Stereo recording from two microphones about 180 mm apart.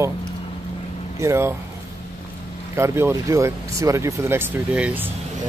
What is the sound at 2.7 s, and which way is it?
Speech, 15° right (ahead or behind).